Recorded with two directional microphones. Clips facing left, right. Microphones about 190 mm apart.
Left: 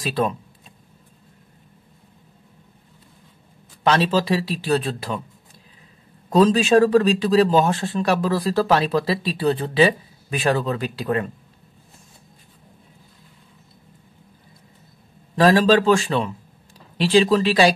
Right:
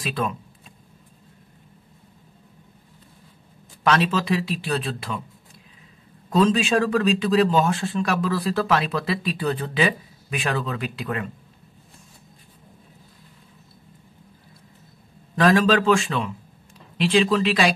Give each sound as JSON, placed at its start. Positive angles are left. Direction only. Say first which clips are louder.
{"t": 0.0, "sound": "speech", "louder": "left 4 dB", "side_deg": 35}
{"t": 3.8, "sound": "speech", "louder": "left 2 dB", "side_deg": 30}
{"t": 6.3, "sound": "speech", "louder": "left 4 dB", "side_deg": 40}
{"t": 15.3, "sound": "speech", "louder": "left 3 dB", "side_deg": 30}